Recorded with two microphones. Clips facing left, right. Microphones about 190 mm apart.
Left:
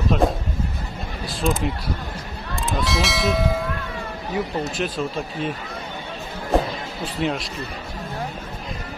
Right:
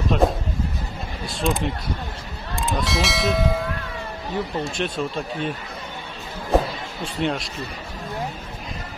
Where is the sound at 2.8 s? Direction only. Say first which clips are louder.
Left 1 dB; centre (ahead or behind).